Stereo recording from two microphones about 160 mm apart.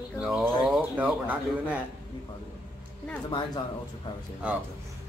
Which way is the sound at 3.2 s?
30° left (ahead or behind).